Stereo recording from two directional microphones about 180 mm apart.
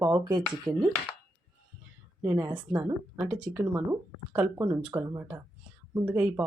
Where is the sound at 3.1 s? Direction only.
5° right (ahead or behind).